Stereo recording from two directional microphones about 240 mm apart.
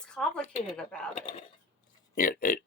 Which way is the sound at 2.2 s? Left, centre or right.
Left.